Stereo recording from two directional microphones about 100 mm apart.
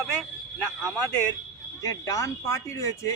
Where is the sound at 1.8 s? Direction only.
35° left (ahead or behind).